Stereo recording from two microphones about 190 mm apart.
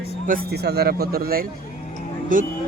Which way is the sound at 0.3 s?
60° right (ahead or behind).